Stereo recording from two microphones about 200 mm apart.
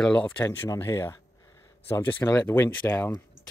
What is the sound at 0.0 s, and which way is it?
Speech, 5° left (ahead or behind).